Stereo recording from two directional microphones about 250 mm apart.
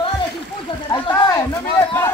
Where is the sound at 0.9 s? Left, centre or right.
Centre.